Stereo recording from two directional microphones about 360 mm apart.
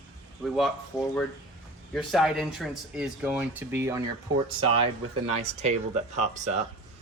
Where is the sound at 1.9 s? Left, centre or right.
Centre.